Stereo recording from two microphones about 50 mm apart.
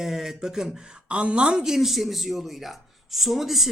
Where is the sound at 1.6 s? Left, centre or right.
Centre.